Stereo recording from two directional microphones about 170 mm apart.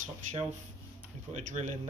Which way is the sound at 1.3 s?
45° right (ahead or behind).